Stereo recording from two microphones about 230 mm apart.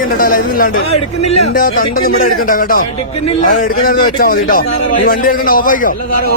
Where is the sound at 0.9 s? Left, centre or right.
Left.